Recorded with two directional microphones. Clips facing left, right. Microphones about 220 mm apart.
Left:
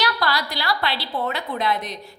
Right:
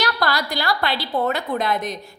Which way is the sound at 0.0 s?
45° right (ahead or behind).